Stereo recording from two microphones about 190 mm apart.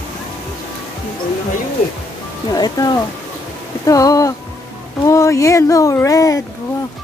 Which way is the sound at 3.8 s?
20° left (ahead or behind).